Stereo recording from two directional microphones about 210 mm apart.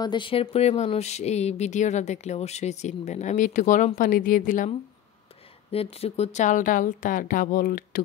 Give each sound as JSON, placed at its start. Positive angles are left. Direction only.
{"t": 0.0, "sound": "speech", "side_deg": 20}
{"t": 5.7, "sound": "speech", "side_deg": 30}